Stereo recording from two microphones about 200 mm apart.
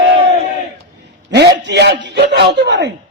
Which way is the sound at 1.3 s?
60° right (ahead or behind).